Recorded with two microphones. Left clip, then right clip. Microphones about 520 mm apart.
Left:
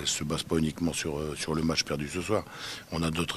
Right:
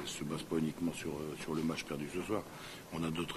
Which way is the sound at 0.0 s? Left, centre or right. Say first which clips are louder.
Left 10 dB; left.